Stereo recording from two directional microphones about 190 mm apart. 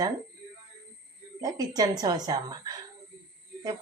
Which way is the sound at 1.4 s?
20° right (ahead or behind).